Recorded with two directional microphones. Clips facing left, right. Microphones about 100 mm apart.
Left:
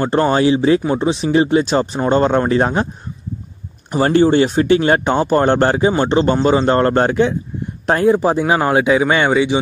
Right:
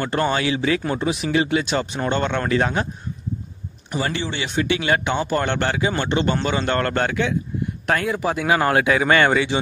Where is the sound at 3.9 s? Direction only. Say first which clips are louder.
Left 13 dB; 45° left (ahead or behind).